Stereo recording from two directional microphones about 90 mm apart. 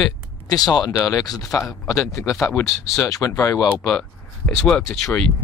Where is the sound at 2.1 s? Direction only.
30° left (ahead or behind).